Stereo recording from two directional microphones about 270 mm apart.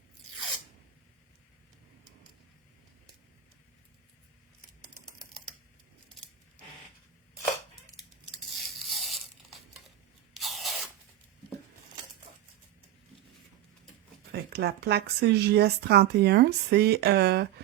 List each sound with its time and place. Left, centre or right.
8.5 s tearing: centre
14.3 s speech: right